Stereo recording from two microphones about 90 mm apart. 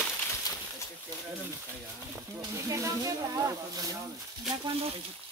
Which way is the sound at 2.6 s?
35° right (ahead or behind).